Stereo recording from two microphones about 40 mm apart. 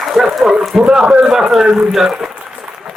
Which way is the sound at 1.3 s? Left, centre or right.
Centre.